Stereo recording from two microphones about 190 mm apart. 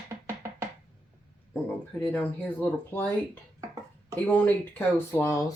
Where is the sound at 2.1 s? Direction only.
10° left (ahead or behind).